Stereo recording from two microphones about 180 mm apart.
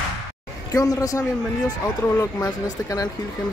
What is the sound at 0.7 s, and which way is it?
Speech, 20° left (ahead or behind).